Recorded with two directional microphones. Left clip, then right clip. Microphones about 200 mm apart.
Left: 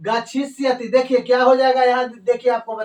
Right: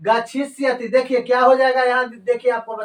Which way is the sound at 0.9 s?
15° left (ahead or behind).